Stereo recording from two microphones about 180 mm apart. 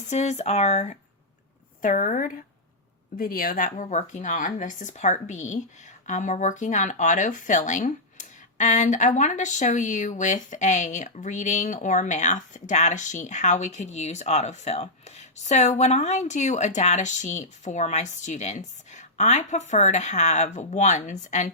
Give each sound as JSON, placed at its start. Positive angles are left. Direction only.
{"t": 0.1, "sound": "speech", "side_deg": 40}